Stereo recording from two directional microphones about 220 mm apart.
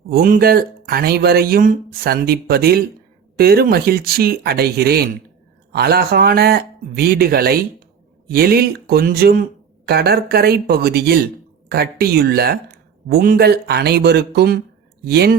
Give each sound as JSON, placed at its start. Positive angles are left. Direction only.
{"t": 0.1, "sound": "speech", "side_deg": -40}